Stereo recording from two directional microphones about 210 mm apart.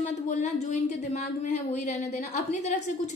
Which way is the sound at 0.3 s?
35° left (ahead or behind).